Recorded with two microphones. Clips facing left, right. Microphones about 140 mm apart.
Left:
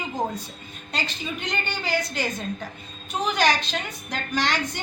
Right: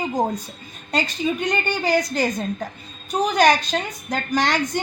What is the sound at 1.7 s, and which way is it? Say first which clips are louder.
Speech: right 7 dB; 40° right (ahead or behind).